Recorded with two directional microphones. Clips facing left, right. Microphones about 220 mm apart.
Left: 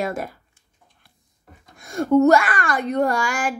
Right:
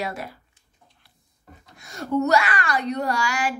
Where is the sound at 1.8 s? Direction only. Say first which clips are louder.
Left 8 dB; 50° left (ahead or behind).